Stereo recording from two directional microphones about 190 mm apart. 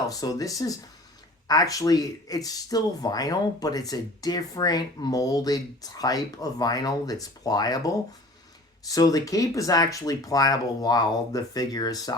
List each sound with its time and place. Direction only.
0.1 s speech: 20° left (ahead or behind)